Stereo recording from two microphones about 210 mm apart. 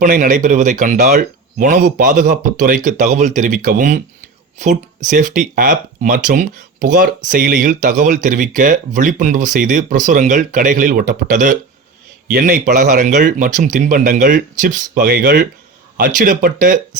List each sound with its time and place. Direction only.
0.0 s speech: 40° right (ahead or behind)